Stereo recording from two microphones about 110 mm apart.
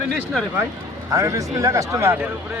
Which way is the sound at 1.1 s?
30° right (ahead or behind).